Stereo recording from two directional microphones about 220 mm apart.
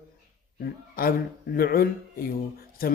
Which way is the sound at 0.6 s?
40° left (ahead or behind).